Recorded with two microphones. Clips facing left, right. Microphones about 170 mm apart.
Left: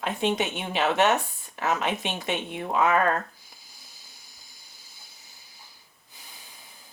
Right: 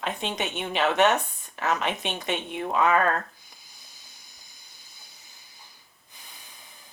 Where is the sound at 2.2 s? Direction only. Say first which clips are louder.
Right 1 dB; 15° left (ahead or behind).